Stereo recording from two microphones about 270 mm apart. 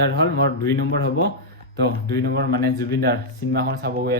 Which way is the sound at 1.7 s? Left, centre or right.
Right.